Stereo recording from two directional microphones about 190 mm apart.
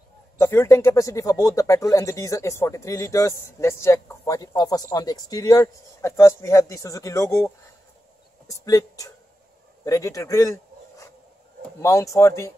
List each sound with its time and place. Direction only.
0.4 s speech: 15° left (ahead or behind)
8.5 s speech: 15° left (ahead or behind)